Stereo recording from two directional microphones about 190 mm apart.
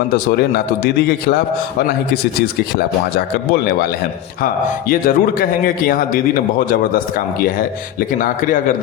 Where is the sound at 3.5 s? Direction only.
55° left (ahead or behind).